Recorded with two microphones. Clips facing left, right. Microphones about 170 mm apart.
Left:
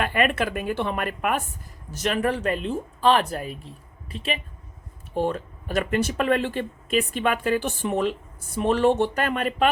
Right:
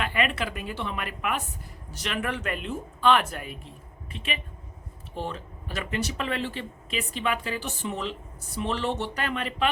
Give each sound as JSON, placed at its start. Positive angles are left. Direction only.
{"t": 0.0, "sound": "speech", "side_deg": 50}
{"t": 5.1, "sound": "speech", "side_deg": 50}